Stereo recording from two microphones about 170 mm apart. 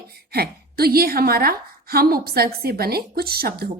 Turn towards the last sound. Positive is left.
turn(degrees=-65)  # may be behind; listen again after turning